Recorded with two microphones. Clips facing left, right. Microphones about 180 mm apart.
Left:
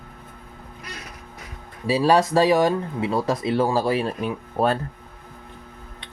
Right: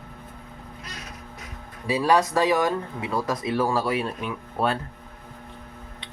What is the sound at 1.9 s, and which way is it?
Speech, 30° left (ahead or behind).